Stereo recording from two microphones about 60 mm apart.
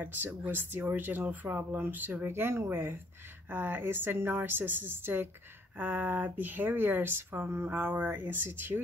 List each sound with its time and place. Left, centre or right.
0.0 s speech: right
2.2 s speech: right